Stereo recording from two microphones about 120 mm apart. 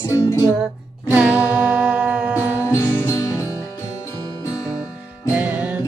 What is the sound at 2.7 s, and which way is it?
Music, 25° left (ahead or behind).